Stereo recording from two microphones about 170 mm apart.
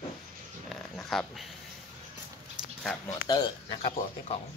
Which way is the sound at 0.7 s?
Centre (ahead or behind).